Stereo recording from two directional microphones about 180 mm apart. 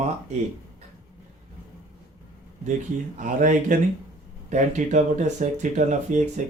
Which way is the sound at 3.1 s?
45° right (ahead or behind).